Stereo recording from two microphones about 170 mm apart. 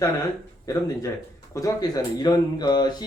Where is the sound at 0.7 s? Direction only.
20° left (ahead or behind).